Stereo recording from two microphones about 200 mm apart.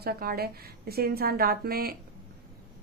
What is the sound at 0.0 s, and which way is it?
A woman's voice, 50° right (ahead or behind).